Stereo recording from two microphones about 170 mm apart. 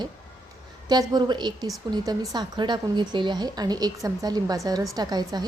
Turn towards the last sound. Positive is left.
turn(degrees=-25)  # may be behind; listen again after turning